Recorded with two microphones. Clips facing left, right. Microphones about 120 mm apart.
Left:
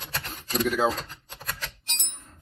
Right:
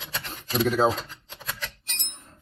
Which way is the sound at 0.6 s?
35° right (ahead or behind).